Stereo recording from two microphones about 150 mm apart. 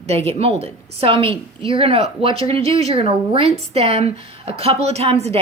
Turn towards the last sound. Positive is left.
turn(degrees=-45)  # may be behind; listen again after turning